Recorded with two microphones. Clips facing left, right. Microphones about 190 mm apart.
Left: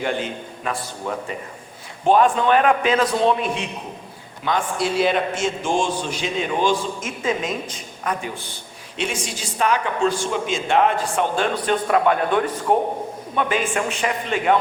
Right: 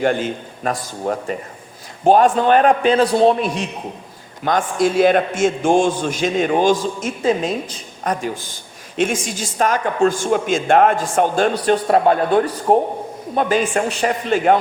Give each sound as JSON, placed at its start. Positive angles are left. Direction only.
{"t": 0.0, "sound": "a man's voice", "side_deg": -45}
{"t": 7.0, "sound": "a man's voice", "side_deg": -35}